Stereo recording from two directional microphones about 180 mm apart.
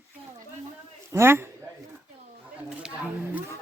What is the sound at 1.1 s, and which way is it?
Speech, 15° right (ahead or behind).